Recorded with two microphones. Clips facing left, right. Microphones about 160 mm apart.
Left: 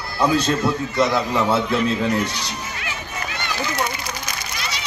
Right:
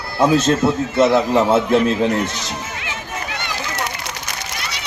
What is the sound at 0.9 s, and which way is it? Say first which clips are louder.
Speech: right 6 dB; 25° right (ahead or behind).